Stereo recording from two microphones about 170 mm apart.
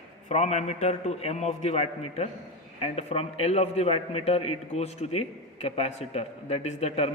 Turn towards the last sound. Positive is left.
turn(degrees=40)  # may be behind; listen again after turning